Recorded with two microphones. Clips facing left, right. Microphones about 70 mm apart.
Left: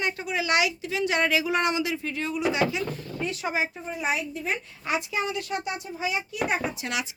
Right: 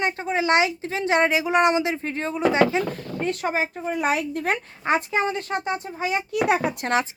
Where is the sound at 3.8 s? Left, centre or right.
Right.